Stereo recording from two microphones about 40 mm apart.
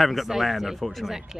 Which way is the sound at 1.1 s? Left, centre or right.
Centre.